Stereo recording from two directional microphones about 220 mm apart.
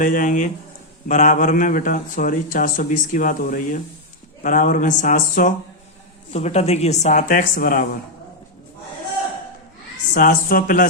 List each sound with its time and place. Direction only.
0.0 s speech: 35° left (ahead or behind)
10.2 s speech: 40° left (ahead or behind)